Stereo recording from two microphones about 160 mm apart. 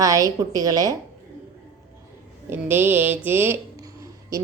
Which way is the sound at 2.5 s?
15° right (ahead or behind).